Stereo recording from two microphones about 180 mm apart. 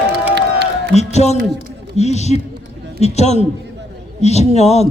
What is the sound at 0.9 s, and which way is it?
A man's voice, 40° left (ahead or behind).